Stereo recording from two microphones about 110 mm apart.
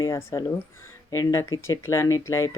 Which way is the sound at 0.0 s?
25° left (ahead or behind).